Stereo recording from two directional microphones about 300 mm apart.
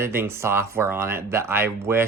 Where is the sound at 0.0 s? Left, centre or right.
Centre.